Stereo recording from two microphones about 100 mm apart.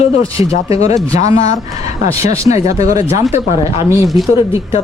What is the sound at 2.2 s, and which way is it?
Speech, 30° right (ahead or behind).